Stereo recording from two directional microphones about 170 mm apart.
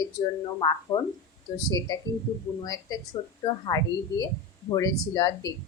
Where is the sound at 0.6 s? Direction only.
25° left (ahead or behind).